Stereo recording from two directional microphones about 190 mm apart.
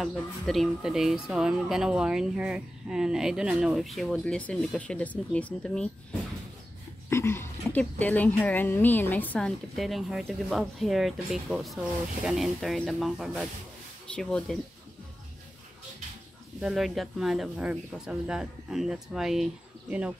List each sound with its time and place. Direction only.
0.0 s speech: centre (ahead or behind)
7.1 s speech: 15° left (ahead or behind)
16.6 s speech: centre (ahead or behind)